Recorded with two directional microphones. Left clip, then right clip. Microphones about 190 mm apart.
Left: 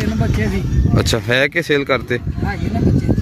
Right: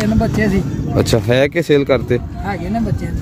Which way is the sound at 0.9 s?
5° right (ahead or behind).